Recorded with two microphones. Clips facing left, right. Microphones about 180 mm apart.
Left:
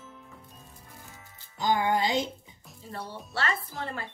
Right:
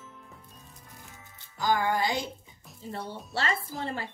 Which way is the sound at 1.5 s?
20° left (ahead or behind).